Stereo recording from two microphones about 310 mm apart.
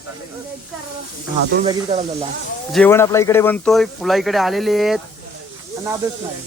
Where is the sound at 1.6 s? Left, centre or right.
Centre.